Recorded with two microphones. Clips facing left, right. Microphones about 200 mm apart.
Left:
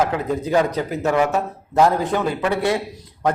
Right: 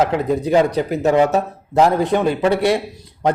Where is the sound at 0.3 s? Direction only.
15° right (ahead or behind).